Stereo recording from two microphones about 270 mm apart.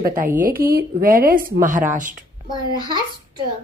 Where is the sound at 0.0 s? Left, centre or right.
Right.